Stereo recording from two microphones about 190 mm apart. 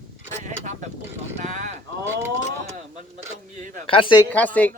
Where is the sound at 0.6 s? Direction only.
40° right (ahead or behind).